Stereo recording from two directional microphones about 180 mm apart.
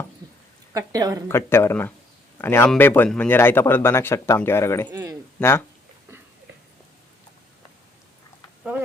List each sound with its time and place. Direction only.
0.7 s a woman's voice: 20° right (ahead or behind)
1.3 s a man's voice: 15° left (ahead or behind)
4.9 s speech: 15° right (ahead or behind)
5.4 s speech: 10° left (ahead or behind)